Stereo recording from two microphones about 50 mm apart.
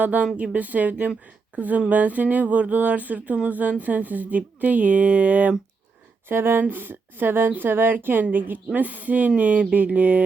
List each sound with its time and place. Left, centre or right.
0.0 s speech: right
6.2 s speech: right
9.4 s a sound: right